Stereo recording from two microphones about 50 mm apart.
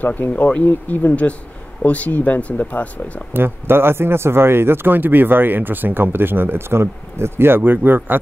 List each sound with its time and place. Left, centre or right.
0.2 s speech: left
3.3 s speech: right